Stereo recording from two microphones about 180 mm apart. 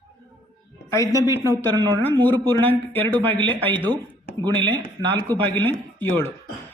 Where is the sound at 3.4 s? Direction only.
30° right (ahead or behind).